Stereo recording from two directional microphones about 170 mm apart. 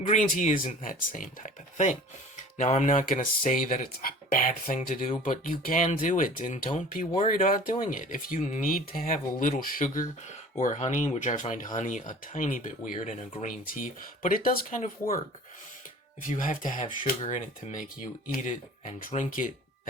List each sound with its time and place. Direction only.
0.1 s speech: 45° left (ahead or behind)
16.4 s speech: 50° left (ahead or behind)
16.8 s speech: 30° left (ahead or behind)
17.3 s speech: 50° left (ahead or behind)